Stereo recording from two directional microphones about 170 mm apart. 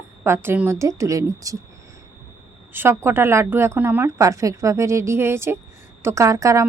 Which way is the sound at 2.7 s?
15° right (ahead or behind).